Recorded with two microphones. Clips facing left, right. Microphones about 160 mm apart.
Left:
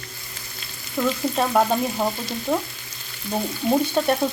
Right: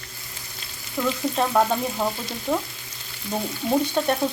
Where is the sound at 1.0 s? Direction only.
10° right (ahead or behind).